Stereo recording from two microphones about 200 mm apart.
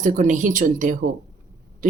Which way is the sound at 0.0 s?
40° right (ahead or behind).